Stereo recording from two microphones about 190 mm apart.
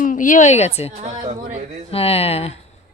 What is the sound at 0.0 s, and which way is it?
Speech, 45° left (ahead or behind).